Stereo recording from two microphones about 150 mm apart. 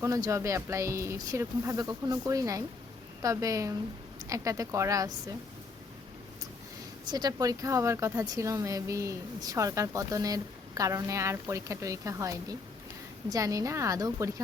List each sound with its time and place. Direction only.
0.0 s speech: 20° right (ahead or behind)
7.1 s speech: 25° right (ahead or behind)